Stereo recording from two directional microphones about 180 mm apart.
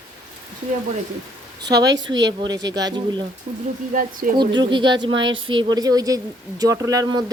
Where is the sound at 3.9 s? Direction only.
50° right (ahead or behind).